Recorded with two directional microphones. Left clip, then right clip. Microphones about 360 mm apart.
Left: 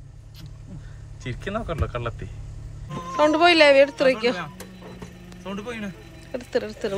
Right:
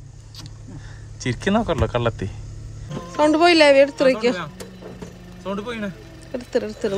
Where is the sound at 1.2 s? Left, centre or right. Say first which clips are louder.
Right 9 dB; centre.